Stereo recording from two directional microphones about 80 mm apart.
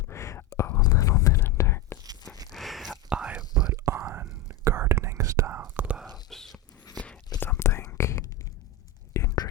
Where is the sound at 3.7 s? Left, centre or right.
Right.